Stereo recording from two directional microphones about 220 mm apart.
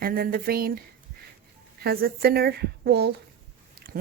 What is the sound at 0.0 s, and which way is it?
Speech, 40° right (ahead or behind).